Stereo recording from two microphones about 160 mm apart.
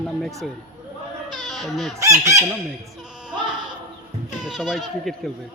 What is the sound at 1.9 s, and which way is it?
Chicken, 20° right (ahead or behind).